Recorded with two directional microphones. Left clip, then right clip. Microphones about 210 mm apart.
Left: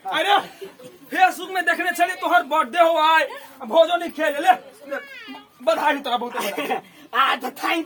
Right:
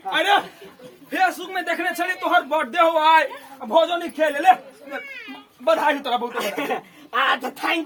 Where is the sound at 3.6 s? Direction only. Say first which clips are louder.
Left 2 dB; 15° left (ahead or behind).